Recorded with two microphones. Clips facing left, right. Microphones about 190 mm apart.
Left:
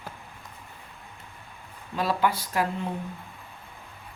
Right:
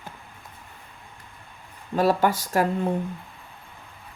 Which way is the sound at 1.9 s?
45° right (ahead or behind).